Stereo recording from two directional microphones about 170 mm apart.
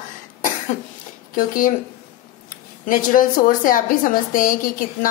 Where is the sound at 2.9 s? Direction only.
50° left (ahead or behind).